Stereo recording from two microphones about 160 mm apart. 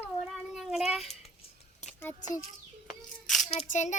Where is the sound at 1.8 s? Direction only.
10° left (ahead or behind).